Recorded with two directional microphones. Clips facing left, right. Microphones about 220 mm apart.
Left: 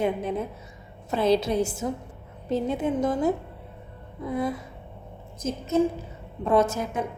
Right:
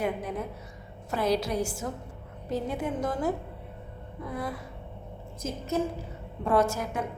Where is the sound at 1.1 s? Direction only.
25° left (ahead or behind).